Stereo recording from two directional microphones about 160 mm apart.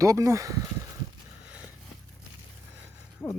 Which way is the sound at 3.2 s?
15° left (ahead or behind).